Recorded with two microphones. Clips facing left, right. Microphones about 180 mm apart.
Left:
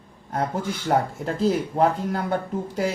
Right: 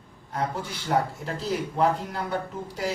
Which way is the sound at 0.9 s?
50° left (ahead or behind).